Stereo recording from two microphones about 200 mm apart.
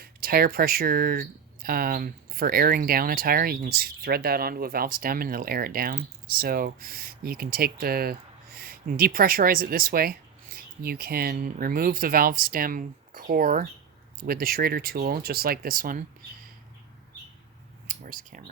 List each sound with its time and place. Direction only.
0.0 s speech: 45° right (ahead or behind)
17.8 s speech: 40° right (ahead or behind)